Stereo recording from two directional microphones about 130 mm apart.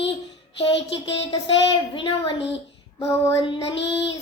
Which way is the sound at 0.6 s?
50° left (ahead or behind).